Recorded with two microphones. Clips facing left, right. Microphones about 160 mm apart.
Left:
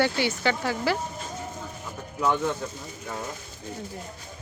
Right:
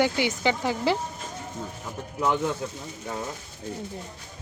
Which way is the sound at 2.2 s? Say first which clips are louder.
Even; 15° right (ahead or behind).